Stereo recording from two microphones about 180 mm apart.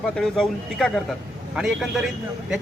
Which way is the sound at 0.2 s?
5° left (ahead or behind).